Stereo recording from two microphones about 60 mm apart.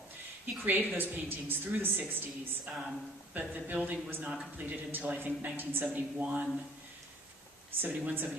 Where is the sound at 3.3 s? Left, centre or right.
Right.